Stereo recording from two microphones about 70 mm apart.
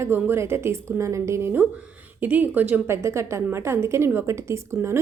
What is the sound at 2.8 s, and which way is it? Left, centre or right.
A woman's voice, right.